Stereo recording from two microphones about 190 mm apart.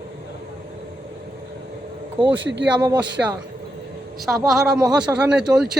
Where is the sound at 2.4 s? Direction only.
70° right (ahead or behind).